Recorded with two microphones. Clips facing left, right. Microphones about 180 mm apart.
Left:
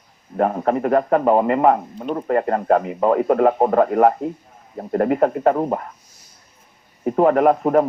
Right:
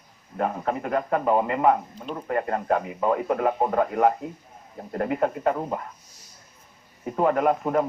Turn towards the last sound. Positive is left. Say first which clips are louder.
# left 7 dB
turn(degrees=50)  # may be behind; listen again after turning